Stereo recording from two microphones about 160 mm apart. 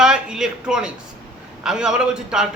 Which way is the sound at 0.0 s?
5° right (ahead or behind).